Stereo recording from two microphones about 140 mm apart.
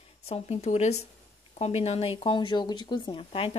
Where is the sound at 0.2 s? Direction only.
50° left (ahead or behind).